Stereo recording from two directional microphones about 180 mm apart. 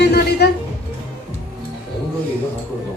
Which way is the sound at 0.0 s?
65° left (ahead or behind).